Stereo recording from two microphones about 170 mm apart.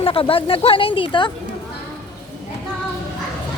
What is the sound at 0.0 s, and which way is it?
Speech, 30° left (ahead or behind).